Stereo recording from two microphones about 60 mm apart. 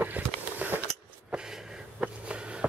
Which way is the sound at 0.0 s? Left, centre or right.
Right.